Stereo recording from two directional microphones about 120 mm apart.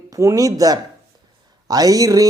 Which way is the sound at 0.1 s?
25° right (ahead or behind).